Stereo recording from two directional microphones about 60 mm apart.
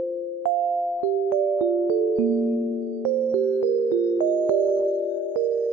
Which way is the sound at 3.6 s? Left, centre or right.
Left.